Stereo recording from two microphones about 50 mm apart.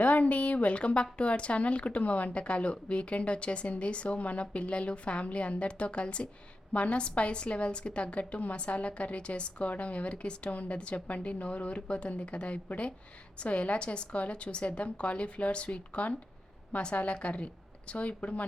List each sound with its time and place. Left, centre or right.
0.0 s a woman's voice: left